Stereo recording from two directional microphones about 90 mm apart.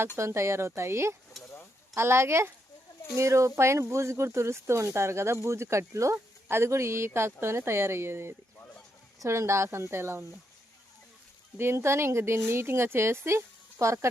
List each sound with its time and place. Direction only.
0.2 s speech: 30° right (ahead or behind)
1.4 s a sound: centre (ahead or behind)
2.0 s speech: 30° right (ahead or behind)
11.5 s speech: 30° right (ahead or behind)